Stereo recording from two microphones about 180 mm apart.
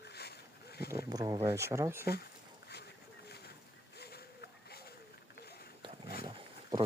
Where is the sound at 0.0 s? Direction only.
65° left (ahead or behind).